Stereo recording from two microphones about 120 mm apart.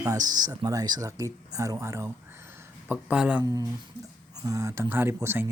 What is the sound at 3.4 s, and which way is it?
Speech, 30° right (ahead or behind).